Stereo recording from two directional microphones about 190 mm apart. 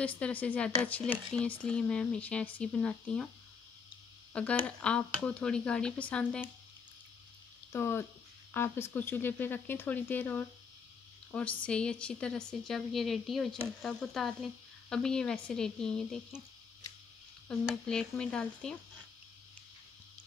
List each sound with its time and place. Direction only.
0.0 s speech: 10° left (ahead or behind)
4.3 s speech: 5° left (ahead or behind)
7.7 s speech: 15° left (ahead or behind)
17.5 s speech: 5° left (ahead or behind)